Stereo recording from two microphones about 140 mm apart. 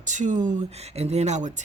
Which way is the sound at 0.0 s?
60° right (ahead or behind).